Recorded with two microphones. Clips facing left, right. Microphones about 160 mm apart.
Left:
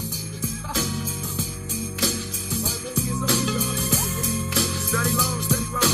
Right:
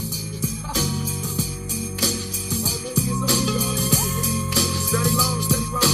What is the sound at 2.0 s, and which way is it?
Music, 35° right (ahead or behind).